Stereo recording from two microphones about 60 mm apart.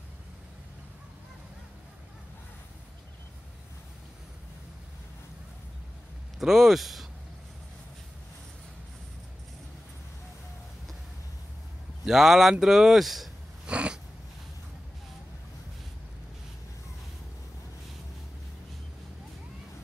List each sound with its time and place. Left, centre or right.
6.4 s speech: centre
12.0 s speech: centre
13.7 s cat: centre